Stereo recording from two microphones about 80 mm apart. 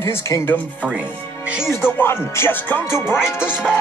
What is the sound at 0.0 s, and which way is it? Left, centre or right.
Speech, left.